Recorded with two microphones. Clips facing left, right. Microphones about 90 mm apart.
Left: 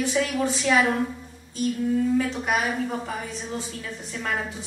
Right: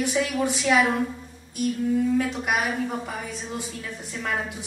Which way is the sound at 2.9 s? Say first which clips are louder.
Left 1 dB; 10° right (ahead or behind).